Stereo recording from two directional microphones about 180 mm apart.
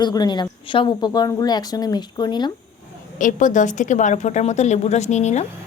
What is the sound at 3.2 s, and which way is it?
A woman's voice, 45° left (ahead or behind).